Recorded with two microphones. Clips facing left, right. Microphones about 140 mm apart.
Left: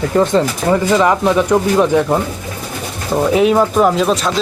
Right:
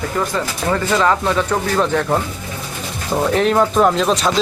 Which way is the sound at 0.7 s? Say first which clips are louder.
Left 3 dB; 15° left (ahead or behind).